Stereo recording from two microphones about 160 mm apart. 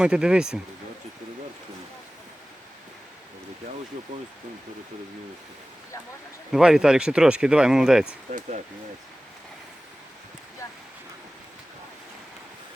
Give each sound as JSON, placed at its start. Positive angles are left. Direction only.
{"t": 0.0, "sound": "speech", "side_deg": -5}
{"t": 6.5, "sound": "speech", "side_deg": -5}
{"t": 8.3, "sound": "speech", "side_deg": -50}